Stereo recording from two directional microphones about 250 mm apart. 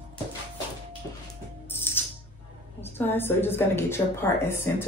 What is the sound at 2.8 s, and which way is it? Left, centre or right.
A woman's voice, centre.